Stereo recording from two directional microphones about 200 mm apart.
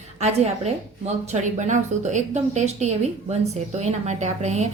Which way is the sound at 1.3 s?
35° right (ahead or behind).